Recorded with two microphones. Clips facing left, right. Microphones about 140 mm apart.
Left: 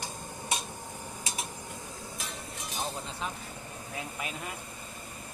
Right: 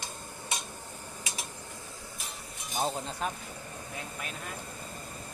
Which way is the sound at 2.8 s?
45° right (ahead or behind).